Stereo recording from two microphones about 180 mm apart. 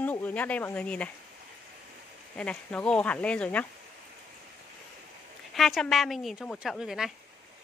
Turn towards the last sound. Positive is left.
turn(degrees=0)  # may be behind; listen again after turning